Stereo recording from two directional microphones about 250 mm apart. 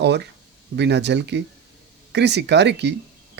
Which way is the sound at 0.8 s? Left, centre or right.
Right.